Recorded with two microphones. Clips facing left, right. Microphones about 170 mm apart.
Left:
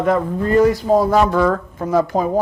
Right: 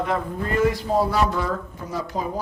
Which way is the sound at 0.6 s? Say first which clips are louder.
Left 7 dB; 45° left (ahead or behind).